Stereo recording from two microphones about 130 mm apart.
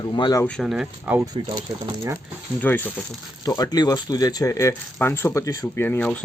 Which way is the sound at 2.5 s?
15° left (ahead or behind).